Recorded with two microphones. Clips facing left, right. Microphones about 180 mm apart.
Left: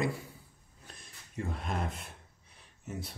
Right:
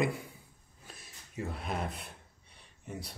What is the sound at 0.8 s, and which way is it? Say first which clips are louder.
Gasp: right 1 dB; 5° right (ahead or behind).